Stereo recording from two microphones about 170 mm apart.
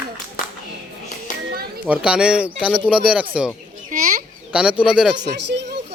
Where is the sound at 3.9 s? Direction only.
50° right (ahead or behind).